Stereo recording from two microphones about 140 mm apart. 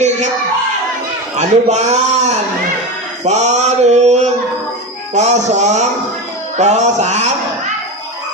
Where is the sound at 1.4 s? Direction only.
55° right (ahead or behind).